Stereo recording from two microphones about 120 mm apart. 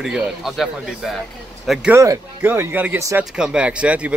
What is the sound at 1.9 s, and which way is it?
Speech, 20° right (ahead or behind).